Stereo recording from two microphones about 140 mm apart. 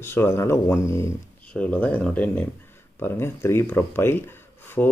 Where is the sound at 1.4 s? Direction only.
10° left (ahead or behind).